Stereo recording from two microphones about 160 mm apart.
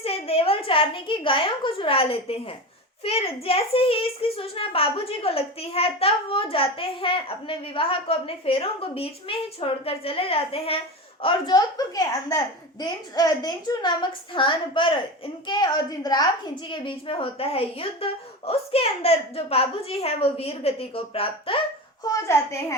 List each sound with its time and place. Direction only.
0.0 s a woman's voice: 40° left (ahead or behind)
22.0 s a woman's voice: 20° left (ahead or behind)